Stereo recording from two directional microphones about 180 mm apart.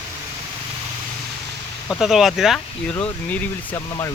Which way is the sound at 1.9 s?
Centre (ahead or behind).